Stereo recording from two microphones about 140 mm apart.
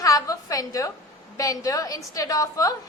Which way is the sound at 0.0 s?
25° left (ahead or behind).